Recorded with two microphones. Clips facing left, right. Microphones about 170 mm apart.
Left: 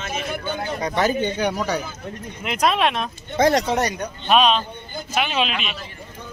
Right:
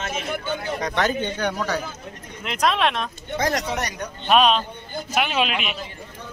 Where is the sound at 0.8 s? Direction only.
5° left (ahead or behind).